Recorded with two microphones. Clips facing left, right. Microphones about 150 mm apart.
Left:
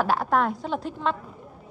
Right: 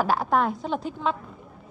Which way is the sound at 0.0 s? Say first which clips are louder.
Even; centre (ahead or behind).